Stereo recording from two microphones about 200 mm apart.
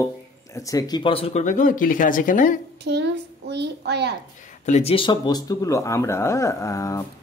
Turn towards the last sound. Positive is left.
turn(degrees=15)  # may be behind; listen again after turning